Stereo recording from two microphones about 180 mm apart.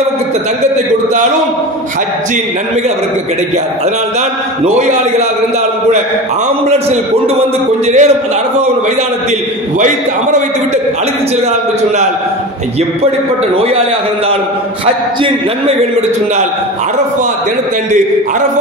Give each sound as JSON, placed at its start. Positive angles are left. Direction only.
{"t": 4.6, "sound": "a man's voice", "side_deg": -40}
{"t": 7.8, "sound": "a man's voice", "side_deg": -40}